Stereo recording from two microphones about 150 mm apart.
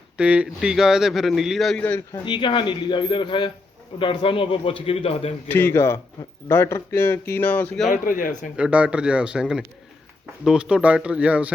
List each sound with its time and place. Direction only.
0.2 s a man's voice: 5° right (ahead or behind)
1.8 s speech: 10° left (ahead or behind)
2.2 s a man's voice: 35° left (ahead or behind)
5.5 s speech: 15° left (ahead or behind)
8.0 s speech: 60° left (ahead or behind)
8.5 s a man's voice: 5° right (ahead or behind)